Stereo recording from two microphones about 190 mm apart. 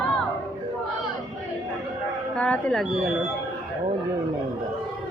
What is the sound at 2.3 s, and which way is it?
Speech, 5° left (ahead or behind).